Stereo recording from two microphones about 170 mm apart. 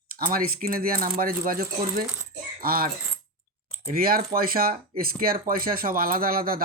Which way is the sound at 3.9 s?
60° right (ahead or behind).